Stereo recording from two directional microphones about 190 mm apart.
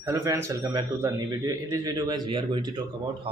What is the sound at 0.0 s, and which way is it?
A man's voice, 15° right (ahead or behind).